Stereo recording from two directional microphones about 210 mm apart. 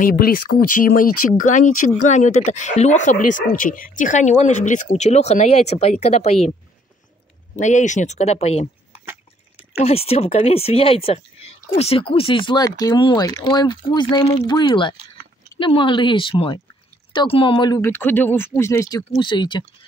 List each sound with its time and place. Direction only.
0.0 s speech: 45° left (ahead or behind)
7.5 s speech: 35° left (ahead or behind)
9.8 s speech: 30° left (ahead or behind)